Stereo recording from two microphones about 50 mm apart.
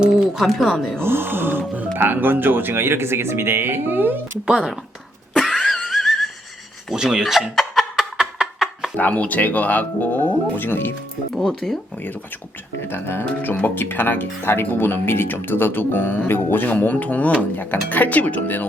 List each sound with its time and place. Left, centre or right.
0.2 s speech: centre
1.0 s speech: right
4.4 s speech: centre
5.4 s a sound: centre
6.9 s speech: centre
7.5 s a sound: centre
7.9 s a sound: centre
9.0 s speech: left
11.6 s speech: centre
12.9 s speech: left